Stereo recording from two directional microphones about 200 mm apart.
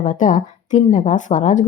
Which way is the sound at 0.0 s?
40° left (ahead or behind).